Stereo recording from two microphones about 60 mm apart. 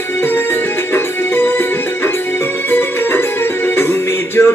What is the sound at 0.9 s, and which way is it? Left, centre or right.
Music, left.